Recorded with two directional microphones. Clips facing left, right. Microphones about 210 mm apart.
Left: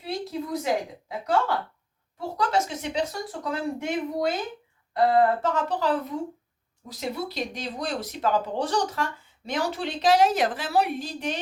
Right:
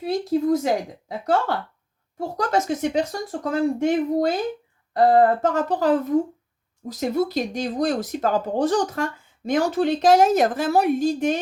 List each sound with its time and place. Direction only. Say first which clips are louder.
0.0 s speech: right 10 dB; 45° right (ahead or behind)